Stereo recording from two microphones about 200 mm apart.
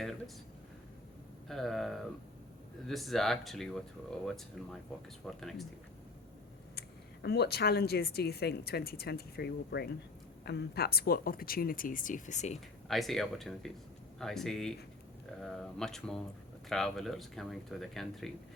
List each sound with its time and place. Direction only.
1.5 s speech: centre (ahead or behind)
6.7 s speech: 55° left (ahead or behind); by 12.5 s 35° left (ahead or behind)
12.5 s speech: centre (ahead or behind)